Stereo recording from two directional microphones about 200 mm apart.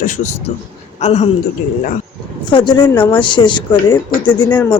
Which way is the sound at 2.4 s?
25° left (ahead or behind).